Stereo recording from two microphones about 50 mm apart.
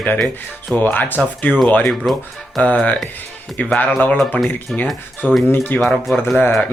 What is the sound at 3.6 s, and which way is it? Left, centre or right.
Speech, left.